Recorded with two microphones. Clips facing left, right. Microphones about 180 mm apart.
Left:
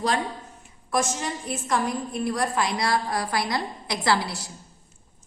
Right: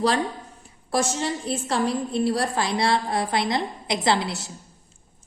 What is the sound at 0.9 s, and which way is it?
A woman's voice, 30° right (ahead or behind).